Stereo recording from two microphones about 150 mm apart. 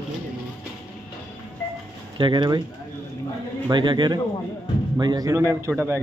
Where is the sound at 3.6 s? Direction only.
30° right (ahead or behind).